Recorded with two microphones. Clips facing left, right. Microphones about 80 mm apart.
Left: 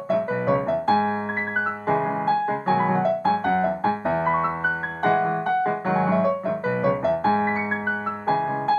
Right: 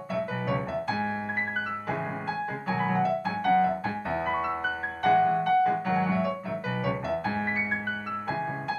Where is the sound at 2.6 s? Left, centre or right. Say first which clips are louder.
Left 4 dB; left.